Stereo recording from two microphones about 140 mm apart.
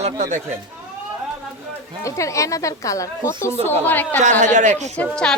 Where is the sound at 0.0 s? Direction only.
60° right (ahead or behind).